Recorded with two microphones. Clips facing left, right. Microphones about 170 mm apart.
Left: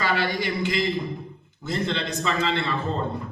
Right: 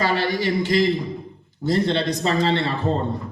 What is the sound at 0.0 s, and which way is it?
Speech, 40° right (ahead or behind).